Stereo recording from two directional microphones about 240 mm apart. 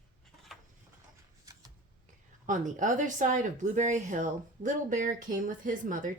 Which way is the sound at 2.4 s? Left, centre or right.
Right.